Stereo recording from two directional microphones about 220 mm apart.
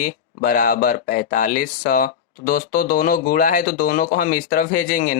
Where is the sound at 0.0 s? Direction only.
40° left (ahead or behind).